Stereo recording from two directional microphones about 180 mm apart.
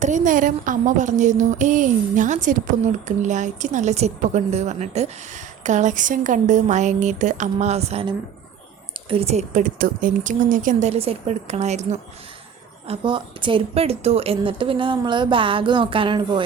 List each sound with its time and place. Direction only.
0.0 s a woman's voice: 45° right (ahead or behind)
12.9 s a woman's voice: 25° right (ahead or behind)